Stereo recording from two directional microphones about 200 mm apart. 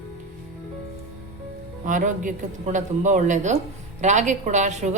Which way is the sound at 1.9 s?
40° right (ahead or behind).